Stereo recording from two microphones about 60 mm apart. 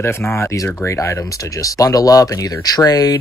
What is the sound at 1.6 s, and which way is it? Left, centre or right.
Speech, left.